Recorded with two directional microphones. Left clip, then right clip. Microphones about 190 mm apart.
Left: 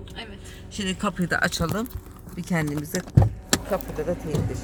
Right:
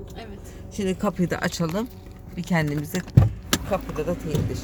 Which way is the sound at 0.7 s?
Centre (ahead or behind).